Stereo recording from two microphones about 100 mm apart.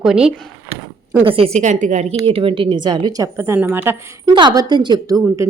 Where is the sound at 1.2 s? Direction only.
65° right (ahead or behind); by 3.9 s 20° right (ahead or behind).